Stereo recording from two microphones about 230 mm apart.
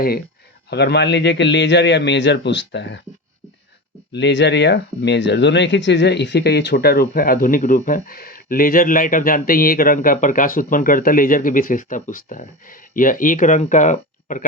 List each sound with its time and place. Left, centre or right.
0.7 s a man's voice: left
4.1 s speech: left